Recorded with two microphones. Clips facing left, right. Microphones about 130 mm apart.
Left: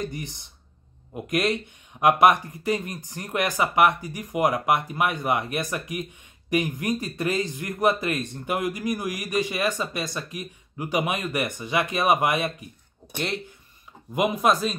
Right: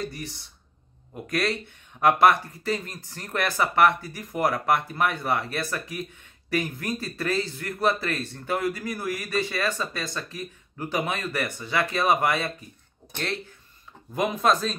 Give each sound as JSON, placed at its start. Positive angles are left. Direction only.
{"t": 0.0, "sound": "speech", "side_deg": 20}